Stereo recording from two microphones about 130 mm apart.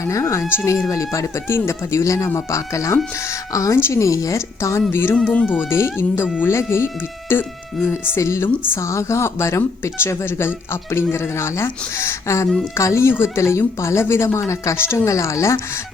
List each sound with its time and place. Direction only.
0.0 s speech: 25° left (ahead or behind)
5.1 s speech: 10° left (ahead or behind)